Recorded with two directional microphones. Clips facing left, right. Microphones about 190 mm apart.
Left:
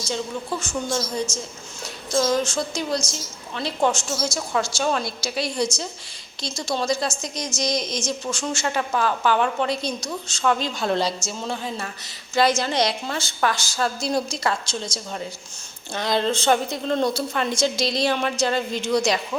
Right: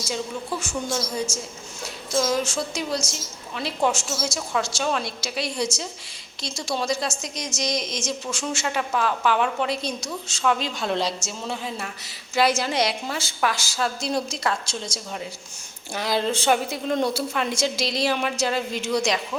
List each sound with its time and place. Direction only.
0.6 s a woman's voice: 10° right (ahead or behind)
16.0 s a woman's voice: 5° right (ahead or behind)